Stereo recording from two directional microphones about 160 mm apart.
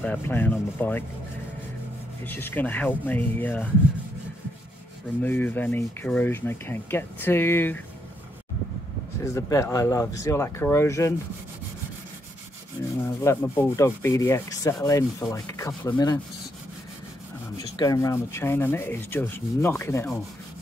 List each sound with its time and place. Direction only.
0.0 s rub: 10° left (ahead or behind)
2.2 s rub: 10° left (ahead or behind)
5.2 s rub: 10° left (ahead or behind)
9.2 s rub: 20° left (ahead or behind)
13.2 s rub: 15° left (ahead or behind)
17.6 s rub: 25° left (ahead or behind)